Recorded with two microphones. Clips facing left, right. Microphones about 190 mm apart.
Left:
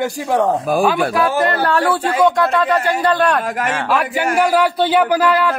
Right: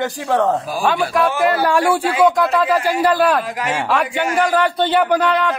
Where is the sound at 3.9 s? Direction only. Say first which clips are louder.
Left 2 dB; 5° left (ahead or behind).